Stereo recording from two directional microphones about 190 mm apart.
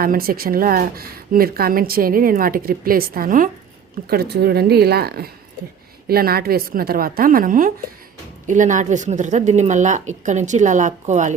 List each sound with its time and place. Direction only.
0.0 s a woman's voice: 50° right (ahead or behind)